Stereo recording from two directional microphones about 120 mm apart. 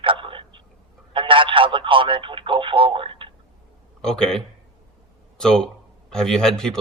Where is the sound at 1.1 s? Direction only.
45° right (ahead or behind).